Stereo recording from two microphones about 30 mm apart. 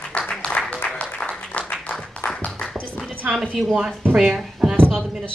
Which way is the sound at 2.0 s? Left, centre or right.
Left.